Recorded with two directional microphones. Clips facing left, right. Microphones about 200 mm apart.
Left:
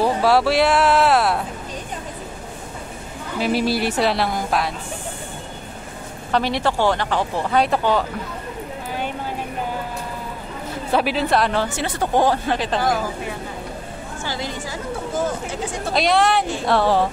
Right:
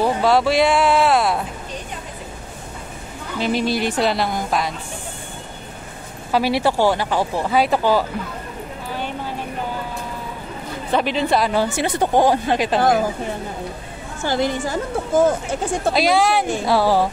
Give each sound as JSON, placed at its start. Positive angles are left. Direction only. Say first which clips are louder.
{"t": 0.0, "sound": "speech", "louder": "even", "side_deg": 5}
{"t": 3.3, "sound": "a woman's voice", "louder": "even", "side_deg": 5}
{"t": 6.3, "sound": "speech", "louder": "right 2 dB", "side_deg": -10}
{"t": 10.9, "sound": "a woman's voice", "louder": "right 1 dB", "side_deg": 5}
{"t": 11.6, "sound": "speech", "louder": "right 4 dB", "side_deg": -15}
{"t": 14.2, "sound": "a woman's voice", "louder": "right 9 dB", "side_deg": -55}
{"t": 15.9, "sound": "a woman's voice", "louder": "even", "side_deg": 0}